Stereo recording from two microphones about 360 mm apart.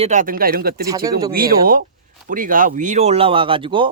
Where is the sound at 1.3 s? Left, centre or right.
Right.